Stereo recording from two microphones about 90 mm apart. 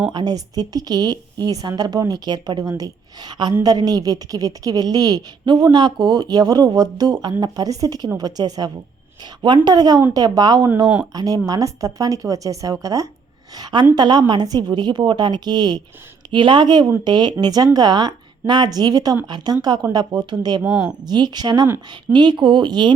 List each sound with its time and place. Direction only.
0.1 s speech: 60° right (ahead or behind)
0.3 s a woman's voice: 50° right (ahead or behind)
13.6 s a woman's voice: 55° right (ahead or behind)
16.3 s a woman's voice: 65° right (ahead or behind)
20.7 s a woman's voice: 10° right (ahead or behind)
21.1 s a woman's voice: 55° right (ahead or behind)